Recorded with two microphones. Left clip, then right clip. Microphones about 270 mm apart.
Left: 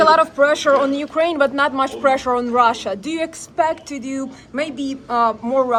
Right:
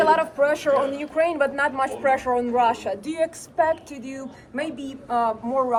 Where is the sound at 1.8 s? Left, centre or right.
Centre.